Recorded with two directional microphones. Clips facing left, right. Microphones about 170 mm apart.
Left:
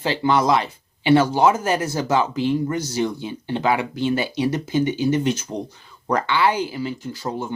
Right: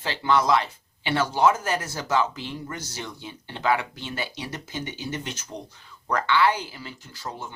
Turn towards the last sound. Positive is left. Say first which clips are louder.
# left 9 dB
turn(degrees=15)  # may be behind; listen again after turning